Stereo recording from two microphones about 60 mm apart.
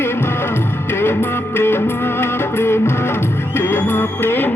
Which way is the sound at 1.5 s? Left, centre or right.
Left.